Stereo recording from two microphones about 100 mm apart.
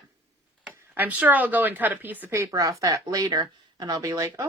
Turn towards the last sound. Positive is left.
turn(degrees=-30)  # may be behind; listen again after turning